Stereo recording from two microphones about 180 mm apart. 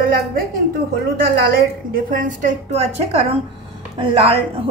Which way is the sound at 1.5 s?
50° right (ahead or behind).